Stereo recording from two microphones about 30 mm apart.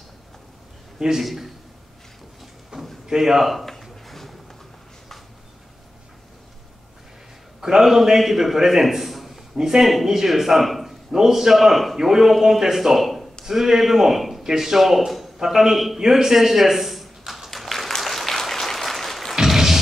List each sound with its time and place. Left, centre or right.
0.9 s a man's voice: centre
1.2 s a man's voice: centre
2.7 s drawer open or close: right
3.2 s a man's voice: centre
3.4 s speech: centre
3.8 s a sound: centre
7.6 s a man's voice: centre
8.8 s a sound: centre
9.6 s a man's voice: centre
11.1 s a man's voice: centre
17.2 s tap: centre
17.5 s applause: centre
19.4 s a sound: centre